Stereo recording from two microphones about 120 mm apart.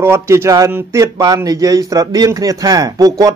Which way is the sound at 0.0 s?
20° right (ahead or behind).